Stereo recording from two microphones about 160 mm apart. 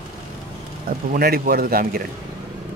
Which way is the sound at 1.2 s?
65° right (ahead or behind).